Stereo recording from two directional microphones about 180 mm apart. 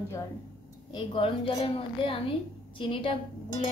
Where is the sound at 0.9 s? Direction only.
30° left (ahead or behind).